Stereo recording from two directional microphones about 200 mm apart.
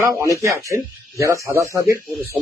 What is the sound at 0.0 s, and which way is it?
Speech, 15° right (ahead or behind).